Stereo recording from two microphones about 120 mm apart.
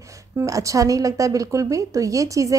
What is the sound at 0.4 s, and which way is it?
A woman's voice, 25° right (ahead or behind).